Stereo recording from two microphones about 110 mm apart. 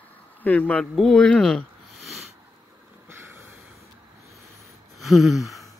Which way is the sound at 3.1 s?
20° right (ahead or behind).